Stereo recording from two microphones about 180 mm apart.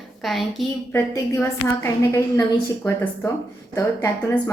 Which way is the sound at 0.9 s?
15° left (ahead or behind).